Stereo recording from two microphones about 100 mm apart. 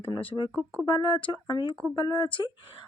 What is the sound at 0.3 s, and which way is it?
Speech, 55° left (ahead or behind).